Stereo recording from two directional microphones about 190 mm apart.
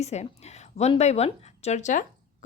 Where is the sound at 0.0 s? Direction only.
35° left (ahead or behind).